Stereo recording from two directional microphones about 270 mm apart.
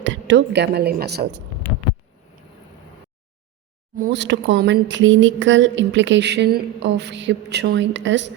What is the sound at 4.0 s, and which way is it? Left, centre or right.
Speech, right.